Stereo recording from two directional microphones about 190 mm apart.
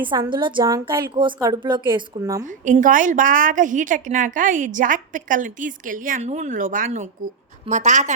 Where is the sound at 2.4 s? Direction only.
40° right (ahead or behind).